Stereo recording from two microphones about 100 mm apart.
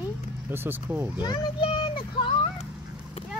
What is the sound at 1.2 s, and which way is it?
Speech, 55° left (ahead or behind).